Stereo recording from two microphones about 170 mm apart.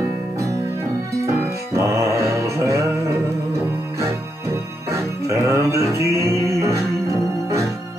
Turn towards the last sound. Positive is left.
turn(degrees=-15)  # may be behind; listen again after turning